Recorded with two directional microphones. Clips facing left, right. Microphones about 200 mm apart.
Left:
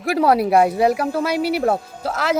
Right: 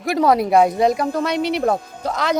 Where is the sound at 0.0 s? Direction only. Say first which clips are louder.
Even; 5° left (ahead or behind).